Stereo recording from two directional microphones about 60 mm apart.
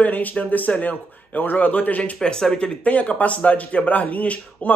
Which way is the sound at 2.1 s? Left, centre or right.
Centre.